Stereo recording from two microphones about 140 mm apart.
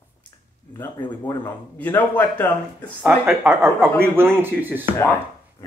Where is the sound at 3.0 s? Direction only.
15° right (ahead or behind).